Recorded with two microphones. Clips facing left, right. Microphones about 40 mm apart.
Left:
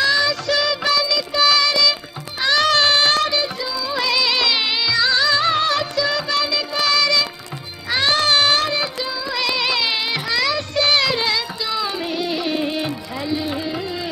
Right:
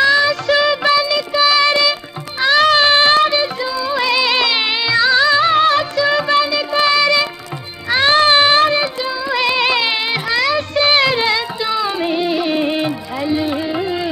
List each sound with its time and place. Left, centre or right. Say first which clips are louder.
0.0 s music: right 5 dB; centre